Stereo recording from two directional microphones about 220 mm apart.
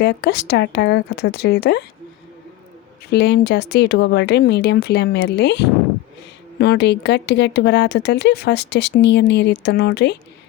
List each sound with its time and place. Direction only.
0.0 s speech: 50° left (ahead or behind)
3.1 s speech: 50° left (ahead or behind)